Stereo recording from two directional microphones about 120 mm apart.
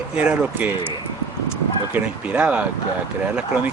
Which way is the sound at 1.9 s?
10° right (ahead or behind).